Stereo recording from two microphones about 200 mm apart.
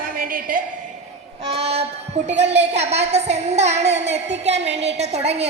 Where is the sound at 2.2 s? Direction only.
35° right (ahead or behind).